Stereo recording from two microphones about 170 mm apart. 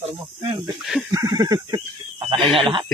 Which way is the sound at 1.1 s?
20° right (ahead or behind).